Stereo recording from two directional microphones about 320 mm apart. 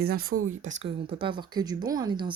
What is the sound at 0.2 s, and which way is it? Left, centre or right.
Speech, right.